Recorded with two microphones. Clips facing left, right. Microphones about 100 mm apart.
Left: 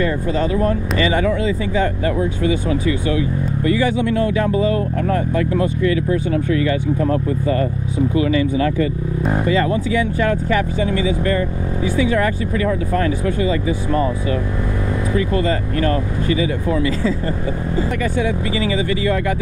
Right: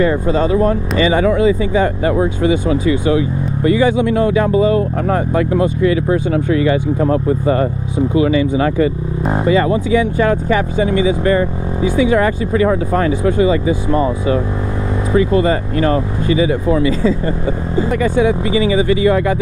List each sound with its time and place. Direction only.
0.0 s speech: 25° right (ahead or behind)
17.7 s speech: 20° right (ahead or behind)